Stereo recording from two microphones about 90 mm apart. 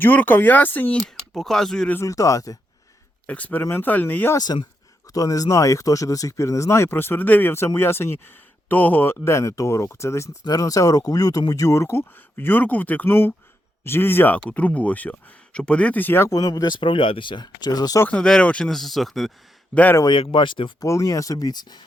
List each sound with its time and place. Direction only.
0.0 s speech: 20° left (ahead or behind)
1.3 s speech: 5° left (ahead or behind)
2.0 s speech: 35° left (ahead or behind)
3.2 s speech: 15° left (ahead or behind)
4.4 s speech: 50° left (ahead or behind); by 10.3 s 35° left (ahead or behind)
10.4 s speech: 45° left (ahead or behind); by 16.3 s 25° left (ahead or behind)
16.3 s speech: 45° left (ahead or behind)
18.1 s speech: 10° left (ahead or behind)
19.7 s speech: 20° left (ahead or behind)
20.1 s speech: 65° left (ahead or behind)
20.8 s speech: 35° left (ahead or behind); by 21.8 s 50° left (ahead or behind)